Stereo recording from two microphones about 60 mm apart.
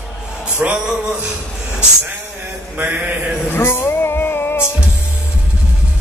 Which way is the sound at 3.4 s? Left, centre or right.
Left.